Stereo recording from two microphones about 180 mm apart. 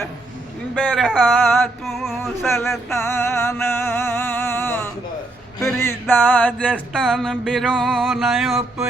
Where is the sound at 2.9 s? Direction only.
15° left (ahead or behind).